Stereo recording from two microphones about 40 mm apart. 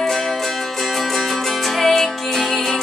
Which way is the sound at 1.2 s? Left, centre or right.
Centre.